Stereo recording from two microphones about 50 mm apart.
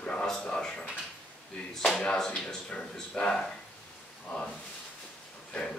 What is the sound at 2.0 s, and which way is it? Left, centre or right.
Speech, centre.